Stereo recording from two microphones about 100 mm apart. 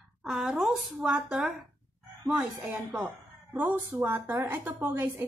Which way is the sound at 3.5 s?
20° right (ahead or behind).